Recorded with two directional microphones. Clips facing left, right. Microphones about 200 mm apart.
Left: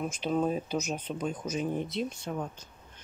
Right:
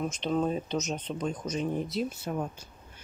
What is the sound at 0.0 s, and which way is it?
Speech, 5° left (ahead or behind).